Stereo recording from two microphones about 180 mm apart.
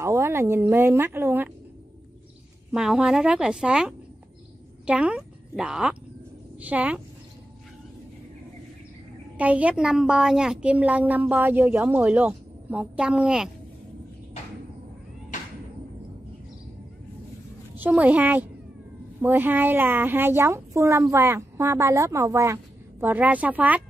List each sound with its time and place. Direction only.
0.0 s a woman's voice: 15° right (ahead or behind)
2.7 s a woman's voice: 5° right (ahead or behind)
9.4 s a woman's voice: 5° right (ahead or behind)
15.3 s a sound: 45° left (ahead or behind)
17.7 s a woman's voice: 10° right (ahead or behind)